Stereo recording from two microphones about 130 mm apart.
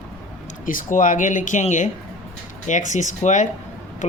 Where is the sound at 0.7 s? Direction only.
90° left; by 3.5 s 70° left (ahead or behind).